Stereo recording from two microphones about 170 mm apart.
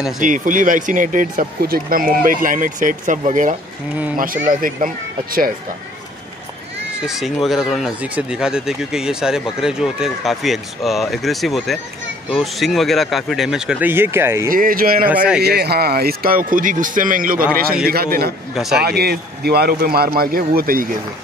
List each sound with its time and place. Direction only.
0.2 s speech: 50° right (ahead or behind)
7.1 s speech: centre (ahead or behind)
14.5 s a man's voice: 55° right (ahead or behind)
15.4 s a man's voice: 70° right (ahead or behind)
18.5 s speech: centre (ahead or behind)
18.8 s a man's voice: 70° right (ahead or behind)